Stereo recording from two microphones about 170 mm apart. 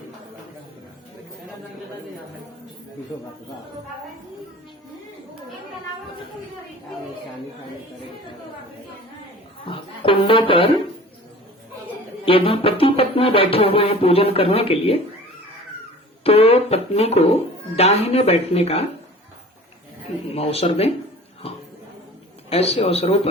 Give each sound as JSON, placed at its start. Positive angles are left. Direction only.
{"t": 9.6, "sound": "music", "side_deg": 30}
{"t": 12.2, "sound": "music", "side_deg": 35}
{"t": 16.2, "sound": "music", "side_deg": 35}
{"t": 20.3, "sound": "music", "side_deg": 35}
{"t": 22.4, "sound": "music", "side_deg": 35}